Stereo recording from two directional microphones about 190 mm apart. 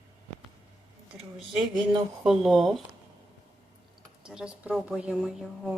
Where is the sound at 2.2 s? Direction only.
Centre (ahead or behind).